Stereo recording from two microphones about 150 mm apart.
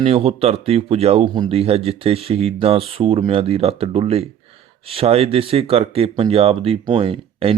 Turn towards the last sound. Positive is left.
turn(degrees=-35)  # may be behind; listen again after turning